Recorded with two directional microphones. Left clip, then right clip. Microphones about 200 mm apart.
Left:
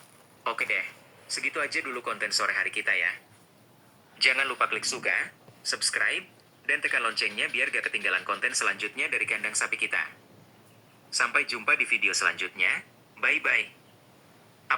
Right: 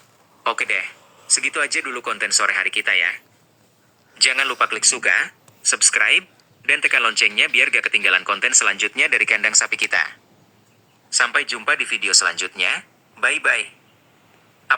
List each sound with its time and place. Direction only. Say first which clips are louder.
0.4 s a sound: right 7 dB; 45° right (ahead or behind)
1.3 s speech: right 9 dB; 45° right (ahead or behind)
11.1 s speech: right 7 dB; 30° right (ahead or behind); by 13.7 s 45° right (ahead or behind)